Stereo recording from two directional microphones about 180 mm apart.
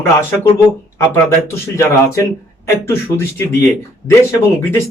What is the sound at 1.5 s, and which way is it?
Speech, 15° left (ahead or behind).